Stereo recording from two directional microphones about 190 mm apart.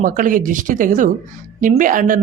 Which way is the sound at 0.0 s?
45° right (ahead or behind).